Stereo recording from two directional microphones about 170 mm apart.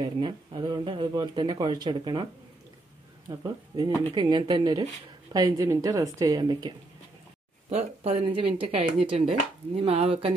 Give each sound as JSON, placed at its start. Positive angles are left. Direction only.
{"t": 0.0, "sound": "speech", "side_deg": -25}
{"t": 3.3, "sound": "speech", "side_deg": -25}
{"t": 7.7, "sound": "speech", "side_deg": -35}